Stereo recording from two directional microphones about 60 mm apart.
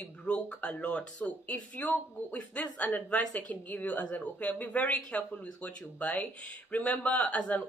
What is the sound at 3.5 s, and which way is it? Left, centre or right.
Speech, left.